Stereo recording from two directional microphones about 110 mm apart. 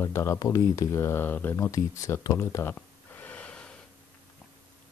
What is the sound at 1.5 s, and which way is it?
Speech, 30° left (ahead or behind).